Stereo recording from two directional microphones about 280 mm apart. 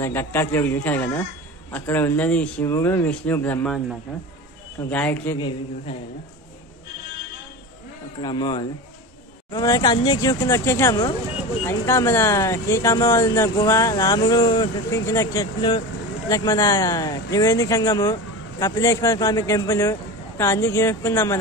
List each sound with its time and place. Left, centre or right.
0.0 s speech: centre
4.8 s a man's voice: centre
8.2 s speech: centre